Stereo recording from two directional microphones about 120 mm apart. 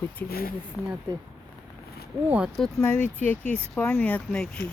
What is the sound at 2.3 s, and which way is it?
Speech, 10° right (ahead or behind).